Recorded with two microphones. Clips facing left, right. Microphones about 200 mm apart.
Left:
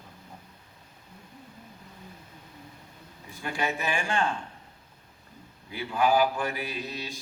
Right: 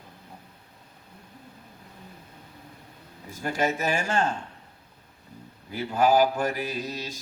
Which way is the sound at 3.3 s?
40° right (ahead or behind).